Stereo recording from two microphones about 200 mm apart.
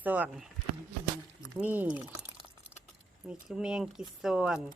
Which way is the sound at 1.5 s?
10° right (ahead or behind).